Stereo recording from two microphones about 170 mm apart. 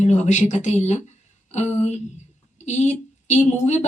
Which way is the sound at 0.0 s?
45° left (ahead or behind).